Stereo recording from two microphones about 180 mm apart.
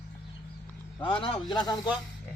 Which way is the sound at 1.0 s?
30° left (ahead or behind).